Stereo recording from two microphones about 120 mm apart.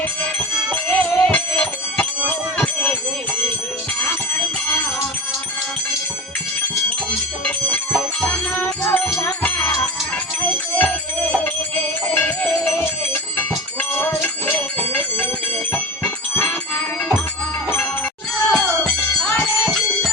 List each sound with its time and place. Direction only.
0.9 s music: 10° left (ahead or behind)
7.9 s music: 5° left (ahead or behind)
12.1 s music: 15° left (ahead or behind)
16.3 s music: 15° left (ahead or behind)
18.5 s music: 5° left (ahead or behind)